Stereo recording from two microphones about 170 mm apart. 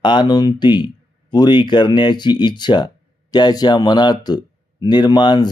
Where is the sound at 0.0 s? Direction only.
25° left (ahead or behind).